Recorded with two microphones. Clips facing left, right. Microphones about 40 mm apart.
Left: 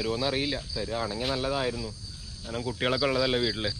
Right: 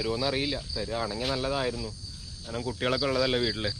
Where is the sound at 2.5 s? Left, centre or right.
Centre.